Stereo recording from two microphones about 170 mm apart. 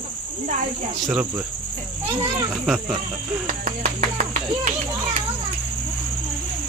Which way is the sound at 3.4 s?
45° right (ahead or behind).